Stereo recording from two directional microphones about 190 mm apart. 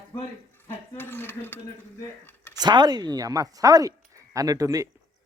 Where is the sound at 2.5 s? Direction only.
20° right (ahead or behind).